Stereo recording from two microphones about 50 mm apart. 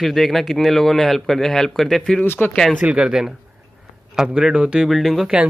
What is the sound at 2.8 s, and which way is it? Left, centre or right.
Speech, right.